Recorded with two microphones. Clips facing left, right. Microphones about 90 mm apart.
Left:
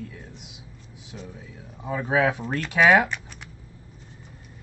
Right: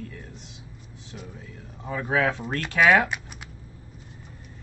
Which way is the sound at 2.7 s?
Centre (ahead or behind).